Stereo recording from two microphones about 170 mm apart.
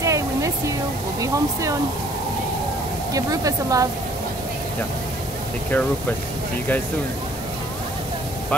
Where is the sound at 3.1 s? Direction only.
20° right (ahead or behind).